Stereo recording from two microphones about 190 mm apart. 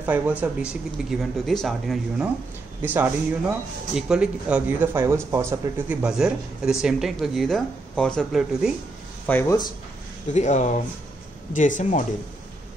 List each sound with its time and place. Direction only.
0.4 s speech: 5° right (ahead or behind)
2.8 s speech: 10° right (ahead or behind)
9.3 s speech: 15° left (ahead or behind)
10.3 s speech: 40° left (ahead or behind)